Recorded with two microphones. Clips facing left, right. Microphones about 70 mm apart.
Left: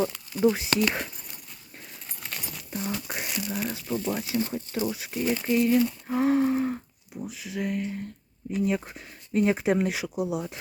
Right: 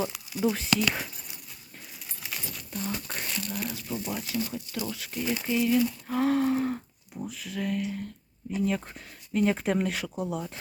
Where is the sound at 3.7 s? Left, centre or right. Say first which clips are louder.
Left 4 dB; left.